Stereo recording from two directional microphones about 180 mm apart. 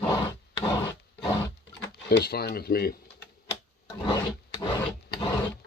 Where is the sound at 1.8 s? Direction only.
65° left (ahead or behind).